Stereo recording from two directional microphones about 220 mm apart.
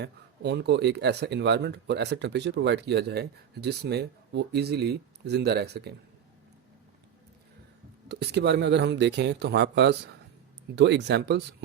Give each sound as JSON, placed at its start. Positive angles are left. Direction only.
{"t": 0.0, "sound": "speech", "side_deg": -50}
{"t": 8.0, "sound": "speech", "side_deg": -50}